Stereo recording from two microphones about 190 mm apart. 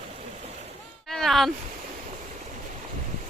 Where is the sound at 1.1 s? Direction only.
Centre (ahead or behind).